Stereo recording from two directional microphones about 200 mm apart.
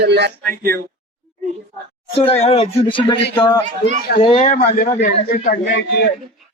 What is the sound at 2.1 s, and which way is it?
A man's voice, 30° left (ahead or behind).